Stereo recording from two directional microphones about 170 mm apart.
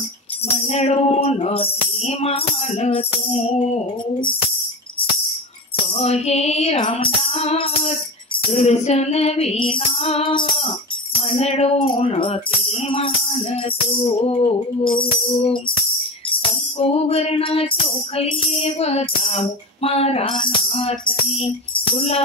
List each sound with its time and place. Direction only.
0.7 s music: 40° left (ahead or behind)
5.9 s music: 40° left (ahead or behind)
16.7 s music: 35° left (ahead or behind)